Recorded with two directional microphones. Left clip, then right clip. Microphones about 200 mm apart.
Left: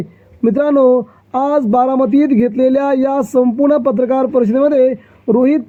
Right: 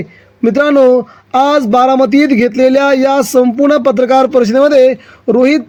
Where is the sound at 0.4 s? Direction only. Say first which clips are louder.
Right 3 dB; 30° right (ahead or behind).